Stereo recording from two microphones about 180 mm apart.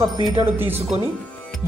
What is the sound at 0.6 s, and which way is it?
Speech, 10° right (ahead or behind).